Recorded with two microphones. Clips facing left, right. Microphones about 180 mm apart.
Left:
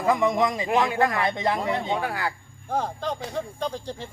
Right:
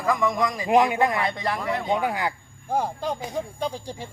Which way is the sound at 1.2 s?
20° left (ahead or behind).